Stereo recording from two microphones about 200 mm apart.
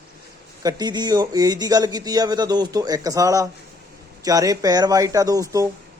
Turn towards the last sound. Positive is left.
turn(degrees=-15)  # may be behind; listen again after turning